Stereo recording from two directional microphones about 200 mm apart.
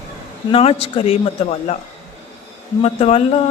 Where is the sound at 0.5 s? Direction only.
30° left (ahead or behind).